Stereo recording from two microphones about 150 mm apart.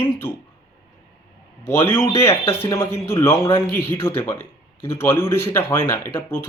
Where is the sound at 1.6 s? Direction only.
15° left (ahead or behind).